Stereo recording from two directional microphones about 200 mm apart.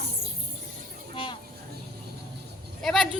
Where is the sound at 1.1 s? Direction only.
25° left (ahead or behind).